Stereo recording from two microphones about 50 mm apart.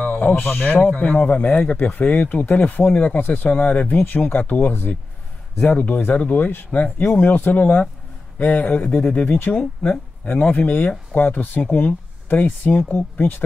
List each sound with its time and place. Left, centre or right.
0.0 s a sound: left
0.4 s a man's voice: left
0.7 s speech: left
2.9 s speech: left
3.2 s speech: left
11.1 s speech: left